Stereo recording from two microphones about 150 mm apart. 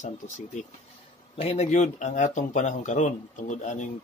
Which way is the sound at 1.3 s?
40° left (ahead or behind).